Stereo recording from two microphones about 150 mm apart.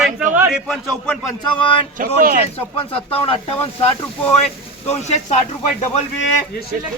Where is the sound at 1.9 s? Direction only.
70° right (ahead or behind).